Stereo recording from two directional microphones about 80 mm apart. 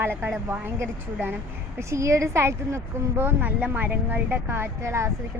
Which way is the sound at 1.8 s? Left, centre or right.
Right.